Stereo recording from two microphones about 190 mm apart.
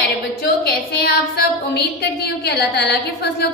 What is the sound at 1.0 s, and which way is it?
Female singing, 55° left (ahead or behind).